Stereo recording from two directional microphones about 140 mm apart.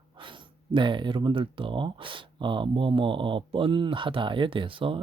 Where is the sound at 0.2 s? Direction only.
35° right (ahead or behind).